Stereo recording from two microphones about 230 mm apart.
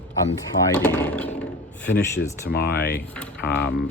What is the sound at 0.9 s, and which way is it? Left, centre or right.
Speech, centre.